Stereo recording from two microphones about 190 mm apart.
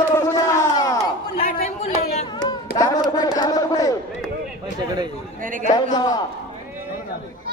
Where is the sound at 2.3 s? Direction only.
20° left (ahead or behind).